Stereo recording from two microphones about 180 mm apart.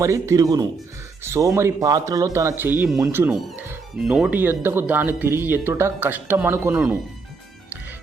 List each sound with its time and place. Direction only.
0.0 s speech: 15° right (ahead or behind)